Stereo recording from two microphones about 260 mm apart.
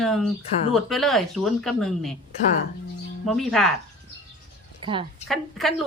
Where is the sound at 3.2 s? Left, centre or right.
Centre.